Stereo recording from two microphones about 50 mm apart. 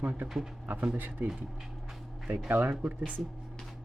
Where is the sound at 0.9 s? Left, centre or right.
Right.